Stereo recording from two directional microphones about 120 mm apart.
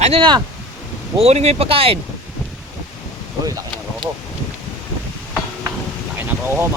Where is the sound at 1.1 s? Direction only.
60° right (ahead or behind).